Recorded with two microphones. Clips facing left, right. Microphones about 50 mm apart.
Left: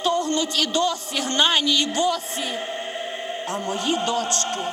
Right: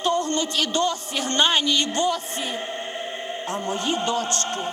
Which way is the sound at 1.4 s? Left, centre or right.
Centre.